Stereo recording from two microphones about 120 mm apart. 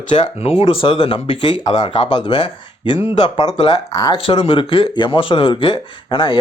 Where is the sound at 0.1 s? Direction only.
60° left (ahead or behind); by 4.2 s 35° left (ahead or behind).